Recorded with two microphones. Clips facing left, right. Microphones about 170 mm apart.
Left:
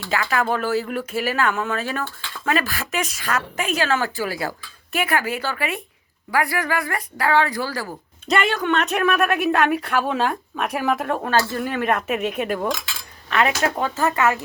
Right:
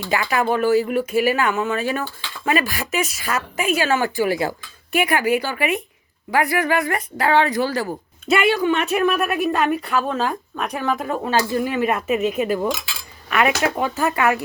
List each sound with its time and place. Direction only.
0.1 s speech: 15° right (ahead or behind)
8.3 s speech: 10° right (ahead or behind)
11.3 s speech: 10° right (ahead or behind)
13.3 s speech: 15° right (ahead or behind)